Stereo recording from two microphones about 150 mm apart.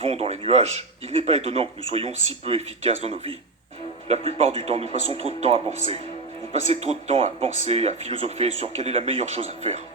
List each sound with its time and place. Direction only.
0.0 s speech: 45° right (ahead or behind)